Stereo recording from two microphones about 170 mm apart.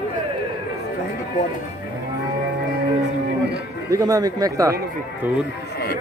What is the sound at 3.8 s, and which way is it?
Speech, 20° right (ahead or behind).